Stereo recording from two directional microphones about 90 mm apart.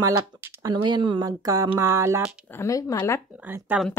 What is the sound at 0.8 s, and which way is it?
Speech, 60° right (ahead or behind).